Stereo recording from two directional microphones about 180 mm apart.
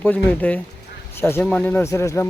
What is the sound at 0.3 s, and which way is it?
Speech, 10° left (ahead or behind).